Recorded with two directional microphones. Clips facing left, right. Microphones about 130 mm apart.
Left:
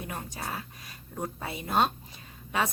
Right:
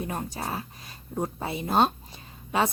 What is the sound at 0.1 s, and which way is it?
Speech, 35° right (ahead or behind).